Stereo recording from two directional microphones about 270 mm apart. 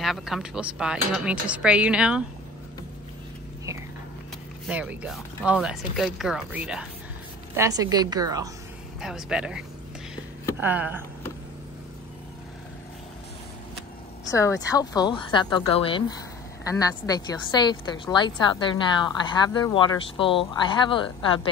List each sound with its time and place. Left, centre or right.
0.0 s speech: centre
4.6 s a woman's voice: centre
9.0 s a woman's voice: centre
14.3 s a woman's voice: centre